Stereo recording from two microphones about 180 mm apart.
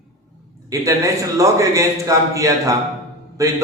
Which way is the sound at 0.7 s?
15° right (ahead or behind).